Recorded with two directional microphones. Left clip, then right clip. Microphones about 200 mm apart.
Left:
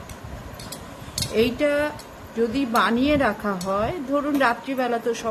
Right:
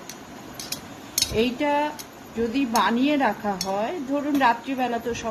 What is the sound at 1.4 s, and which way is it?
A woman's voice, 20° left (ahead or behind).